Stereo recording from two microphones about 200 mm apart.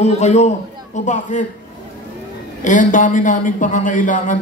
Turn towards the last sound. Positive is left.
turn(degrees=40)  # may be behind; listen again after turning